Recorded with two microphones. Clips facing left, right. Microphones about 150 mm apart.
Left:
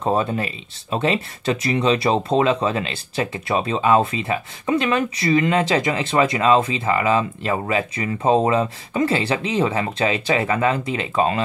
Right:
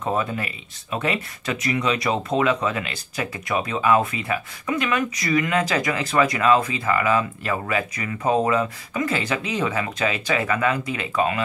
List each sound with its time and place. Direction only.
0.0 s speech: 30° left (ahead or behind)